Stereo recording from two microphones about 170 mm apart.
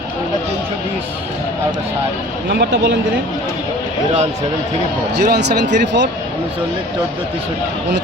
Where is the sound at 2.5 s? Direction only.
90° right.